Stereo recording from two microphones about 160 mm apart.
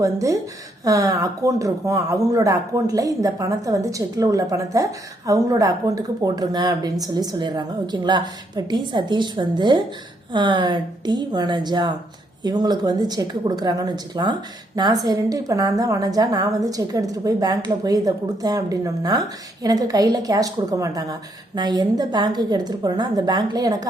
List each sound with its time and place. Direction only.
0.0 s speech: 20° right (ahead or behind)